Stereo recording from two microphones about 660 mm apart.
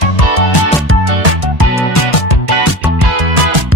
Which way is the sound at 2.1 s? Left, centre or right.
Left.